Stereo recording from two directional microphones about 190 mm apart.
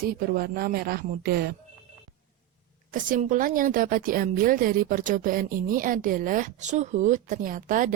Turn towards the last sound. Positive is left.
turn(degrees=-45)  # may be behind; listen again after turning